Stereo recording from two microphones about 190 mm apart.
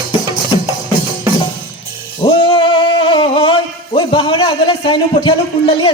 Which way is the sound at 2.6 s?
25° left (ahead or behind).